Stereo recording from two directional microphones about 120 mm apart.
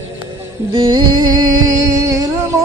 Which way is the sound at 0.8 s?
40° right (ahead or behind).